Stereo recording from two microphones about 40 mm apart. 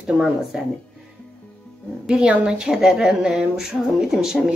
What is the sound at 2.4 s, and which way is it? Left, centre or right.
Speech, centre.